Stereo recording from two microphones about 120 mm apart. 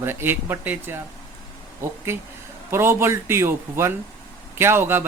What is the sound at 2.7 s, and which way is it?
Speech, 20° right (ahead or behind).